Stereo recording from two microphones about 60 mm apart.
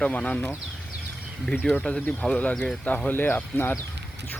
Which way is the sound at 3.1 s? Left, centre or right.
Left.